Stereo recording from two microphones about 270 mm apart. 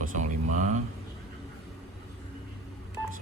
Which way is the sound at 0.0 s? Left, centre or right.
Right.